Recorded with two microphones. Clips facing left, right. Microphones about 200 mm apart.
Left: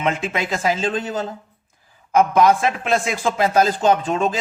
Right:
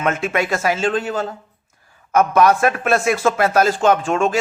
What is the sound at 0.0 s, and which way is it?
Speech, 20° left (ahead or behind).